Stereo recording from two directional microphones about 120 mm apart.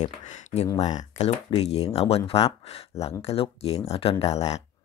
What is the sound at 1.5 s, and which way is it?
Speech, 55° left (ahead or behind).